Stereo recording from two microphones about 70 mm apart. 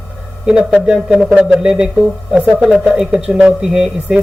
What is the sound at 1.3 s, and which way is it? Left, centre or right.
Speech, right.